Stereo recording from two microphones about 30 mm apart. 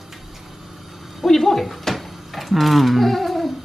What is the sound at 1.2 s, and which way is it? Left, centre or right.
Speech, centre.